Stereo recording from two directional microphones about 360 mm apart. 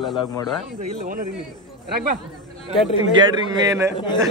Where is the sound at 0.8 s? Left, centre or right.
Right.